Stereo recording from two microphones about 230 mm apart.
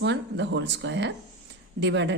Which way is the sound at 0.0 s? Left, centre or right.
Right.